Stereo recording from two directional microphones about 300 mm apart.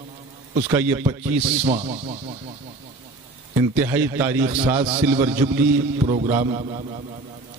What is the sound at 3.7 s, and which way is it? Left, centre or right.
Speech, centre.